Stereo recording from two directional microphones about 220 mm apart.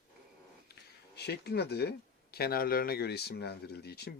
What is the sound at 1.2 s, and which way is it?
Speech, 50° left (ahead or behind).